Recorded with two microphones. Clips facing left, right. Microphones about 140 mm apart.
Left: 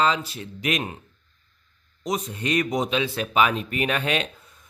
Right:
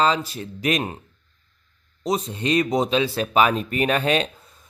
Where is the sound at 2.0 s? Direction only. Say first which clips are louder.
Right 3 dB; 30° right (ahead or behind).